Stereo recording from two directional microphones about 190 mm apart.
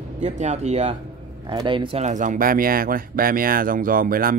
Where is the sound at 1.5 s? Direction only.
25° right (ahead or behind).